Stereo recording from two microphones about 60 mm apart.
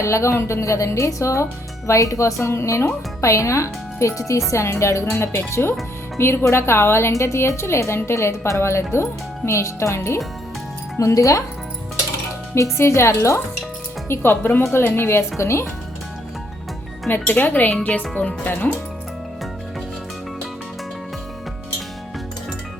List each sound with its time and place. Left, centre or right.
0.0 s a woman's voice: left
2.5 s speech: left
10.9 s a woman's voice: left
12.7 s speech: left
14.1 s speech: left
17.1 s speech: left